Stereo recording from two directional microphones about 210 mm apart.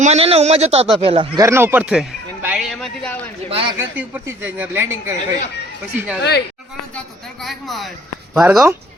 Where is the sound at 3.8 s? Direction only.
10° right (ahead or behind).